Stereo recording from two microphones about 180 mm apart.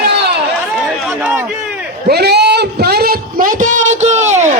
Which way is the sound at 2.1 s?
65° right (ahead or behind).